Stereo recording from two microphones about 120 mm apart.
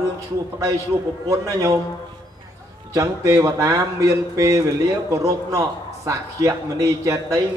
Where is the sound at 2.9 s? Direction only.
25° right (ahead or behind).